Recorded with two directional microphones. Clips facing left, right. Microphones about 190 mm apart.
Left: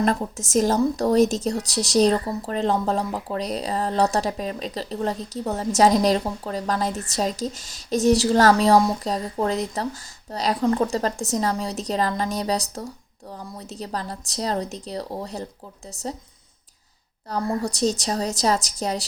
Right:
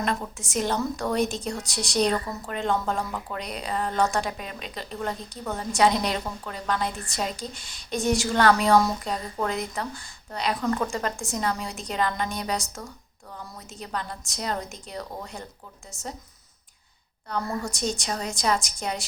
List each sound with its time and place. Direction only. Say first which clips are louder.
0.0 s a woman's voice: left 6 dB; 35° left (ahead or behind)
17.5 s a woman's voice: left 9 dB; 35° left (ahead or behind)